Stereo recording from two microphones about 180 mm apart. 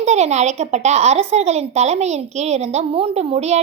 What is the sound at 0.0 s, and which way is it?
Speech, 40° right (ahead or behind).